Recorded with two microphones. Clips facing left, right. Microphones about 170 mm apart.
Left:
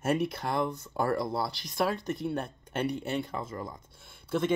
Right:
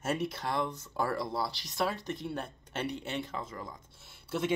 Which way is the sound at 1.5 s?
50° left (ahead or behind).